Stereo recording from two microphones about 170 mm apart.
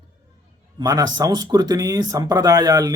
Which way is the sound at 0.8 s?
20° right (ahead or behind).